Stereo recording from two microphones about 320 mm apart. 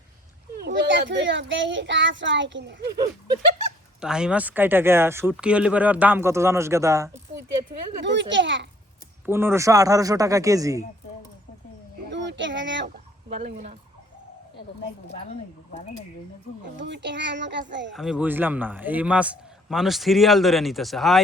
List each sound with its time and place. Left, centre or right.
0.5 s a child's voice: right
4.0 s speech: centre
8.0 s a child's voice: right
9.2 s speech: centre
12.1 s a sound: right
13.3 s turkey: right
16.7 s a child's voice: right
17.9 s a man's voice: centre